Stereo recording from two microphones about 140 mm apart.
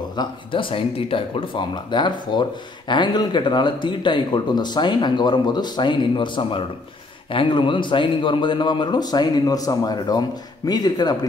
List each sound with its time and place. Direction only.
0.2 s a man's voice: 35° left (ahead or behind)